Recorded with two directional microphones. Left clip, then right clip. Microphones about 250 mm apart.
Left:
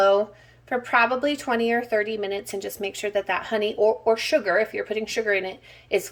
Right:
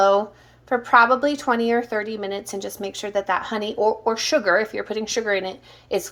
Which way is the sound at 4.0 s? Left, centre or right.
Right.